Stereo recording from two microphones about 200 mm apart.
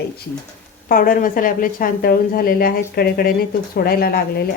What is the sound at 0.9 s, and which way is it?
Speech, 45° left (ahead or behind).